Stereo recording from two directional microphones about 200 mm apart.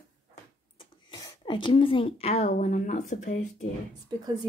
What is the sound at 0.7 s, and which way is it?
Speech, 20° left (ahead or behind).